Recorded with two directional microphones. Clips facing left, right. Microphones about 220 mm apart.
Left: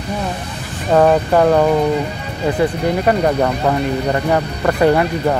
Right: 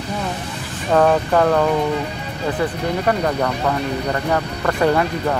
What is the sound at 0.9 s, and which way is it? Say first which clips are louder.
Speech: left 3 dB; 15° left (ahead or behind).